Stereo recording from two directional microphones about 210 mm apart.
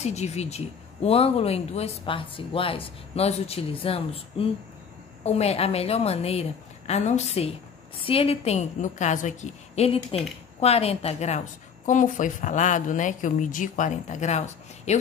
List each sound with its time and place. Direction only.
0.0 s a woman's voice: 30° left (ahead or behind)